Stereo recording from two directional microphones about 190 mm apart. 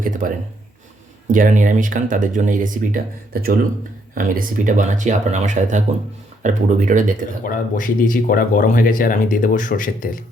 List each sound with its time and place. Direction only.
0.0 s a sound: 45° right (ahead or behind)
1.3 s speech: 45° right (ahead or behind)
4.1 s speech: 45° right (ahead or behind)
7.4 s speech: 45° left (ahead or behind)